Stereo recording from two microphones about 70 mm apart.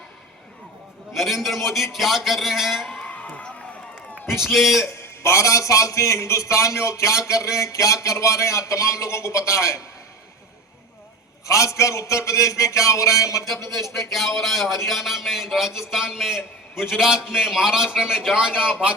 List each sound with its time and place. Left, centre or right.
1.1 s a man's voice: centre
2.9 s a sound: centre
4.3 s a man's voice: centre
4.8 s a man's voice: left
11.4 s a man's voice: left
13.7 s a man's voice: centre